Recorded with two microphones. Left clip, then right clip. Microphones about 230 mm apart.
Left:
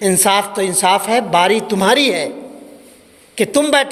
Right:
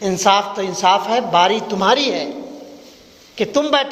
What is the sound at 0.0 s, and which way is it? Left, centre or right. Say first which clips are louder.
A man's voice: left 1 dB; left.